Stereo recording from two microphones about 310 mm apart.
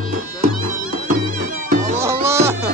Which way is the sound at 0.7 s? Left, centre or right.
Right.